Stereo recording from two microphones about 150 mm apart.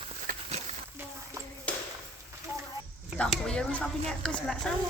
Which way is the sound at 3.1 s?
5° left (ahead or behind).